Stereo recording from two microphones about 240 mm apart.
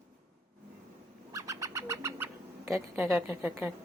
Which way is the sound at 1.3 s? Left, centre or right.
Centre.